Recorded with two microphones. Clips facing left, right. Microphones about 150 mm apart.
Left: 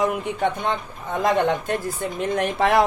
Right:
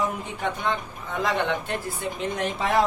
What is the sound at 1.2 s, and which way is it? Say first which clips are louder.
Speech: left 5 dB; 45° left (ahead or behind).